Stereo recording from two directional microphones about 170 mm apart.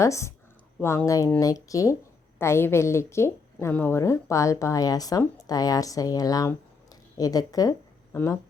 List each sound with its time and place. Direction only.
0.0 s a woman's voice: 15° left (ahead or behind)